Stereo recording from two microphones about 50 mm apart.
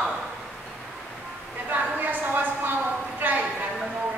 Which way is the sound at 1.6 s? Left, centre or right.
Right.